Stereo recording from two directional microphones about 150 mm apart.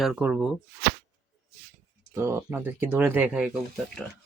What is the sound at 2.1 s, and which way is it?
Speech, 15° right (ahead or behind).